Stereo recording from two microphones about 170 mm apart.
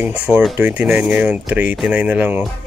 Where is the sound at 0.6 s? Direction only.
15° right (ahead or behind).